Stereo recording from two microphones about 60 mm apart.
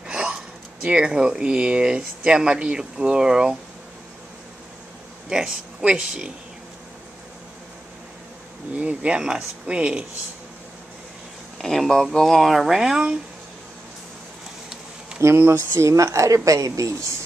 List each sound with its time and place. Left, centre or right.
0.0 s a sound: centre
0.8 s speech: centre
5.3 s speech: centre
8.7 s speech: right
11.5 s speech: centre
15.1 s speech: right